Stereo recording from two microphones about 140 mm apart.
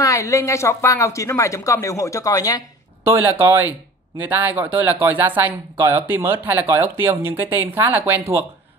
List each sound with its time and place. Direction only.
0.0 s speech: 20° left (ahead or behind)
3.0 s speech: 15° right (ahead or behind)